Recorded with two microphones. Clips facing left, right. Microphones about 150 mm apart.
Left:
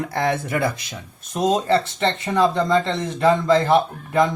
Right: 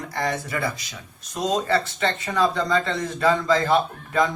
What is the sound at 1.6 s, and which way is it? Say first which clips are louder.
Speech: left 3 dB; 25° left (ahead or behind).